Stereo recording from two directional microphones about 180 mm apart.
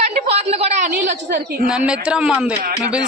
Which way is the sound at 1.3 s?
60° right (ahead or behind).